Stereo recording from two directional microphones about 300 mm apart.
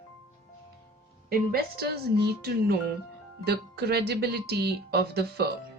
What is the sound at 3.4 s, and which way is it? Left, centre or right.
Speech, right.